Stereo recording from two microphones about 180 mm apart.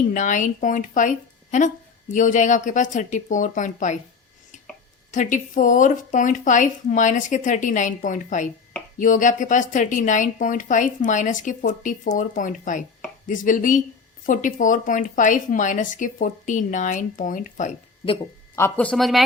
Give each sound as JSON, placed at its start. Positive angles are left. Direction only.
{"t": 0.1, "sound": "speech", "side_deg": 45}
{"t": 5.1, "sound": "speech", "side_deg": 45}
{"t": 18.5, "sound": "speech", "side_deg": 10}